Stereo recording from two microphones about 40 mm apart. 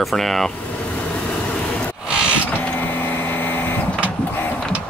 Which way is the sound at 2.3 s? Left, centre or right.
Left.